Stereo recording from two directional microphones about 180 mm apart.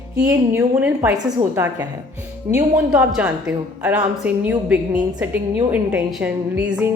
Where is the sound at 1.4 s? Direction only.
20° right (ahead or behind).